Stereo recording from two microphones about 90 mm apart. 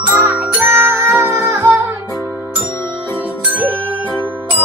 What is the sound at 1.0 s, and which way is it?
Music, 30° right (ahead or behind).